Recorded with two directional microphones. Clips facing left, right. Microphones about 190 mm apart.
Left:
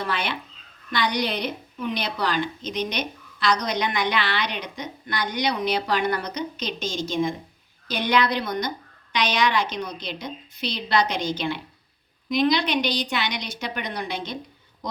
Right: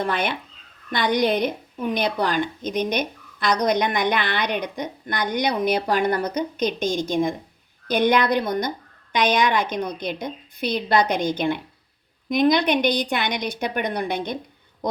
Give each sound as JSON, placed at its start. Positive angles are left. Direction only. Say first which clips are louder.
{"t": 0.0, "sound": "a woman's voice", "louder": "right 4 dB", "side_deg": -50}